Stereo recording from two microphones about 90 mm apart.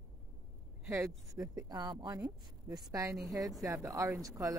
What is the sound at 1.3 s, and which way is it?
A woman's voice, 45° right (ahead or behind).